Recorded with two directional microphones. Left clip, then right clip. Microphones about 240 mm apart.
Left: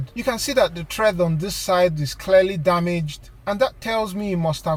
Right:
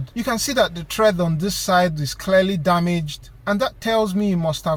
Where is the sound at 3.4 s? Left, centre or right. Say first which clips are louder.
Even; centre.